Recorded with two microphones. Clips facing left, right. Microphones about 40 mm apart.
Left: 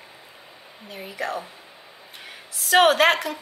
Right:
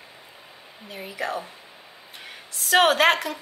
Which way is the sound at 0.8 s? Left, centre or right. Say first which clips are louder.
Even; centre.